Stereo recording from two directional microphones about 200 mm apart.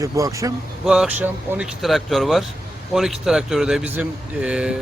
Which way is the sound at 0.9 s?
5° right (ahead or behind).